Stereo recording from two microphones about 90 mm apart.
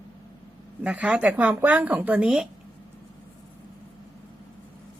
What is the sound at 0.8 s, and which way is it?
Speech, 15° right (ahead or behind).